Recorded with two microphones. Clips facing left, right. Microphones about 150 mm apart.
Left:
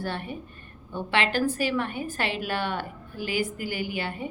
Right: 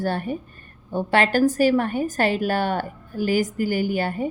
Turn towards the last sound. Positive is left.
turn(degrees=-45)  # may be behind; listen again after turning